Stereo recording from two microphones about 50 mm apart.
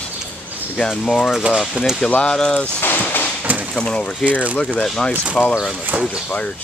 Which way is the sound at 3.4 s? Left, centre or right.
Right.